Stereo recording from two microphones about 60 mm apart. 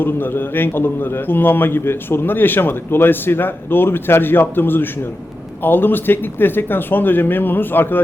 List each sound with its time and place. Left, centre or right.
0.0 s a man's voice: left